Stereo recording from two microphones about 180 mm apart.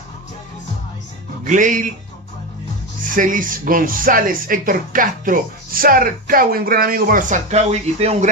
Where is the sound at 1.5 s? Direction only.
45° right (ahead or behind).